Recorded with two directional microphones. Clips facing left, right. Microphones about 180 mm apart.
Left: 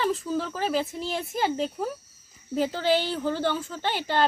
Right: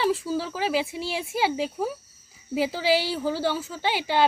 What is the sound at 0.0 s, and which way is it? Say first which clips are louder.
A woman's voice: right 2 dB; 10° right (ahead or behind).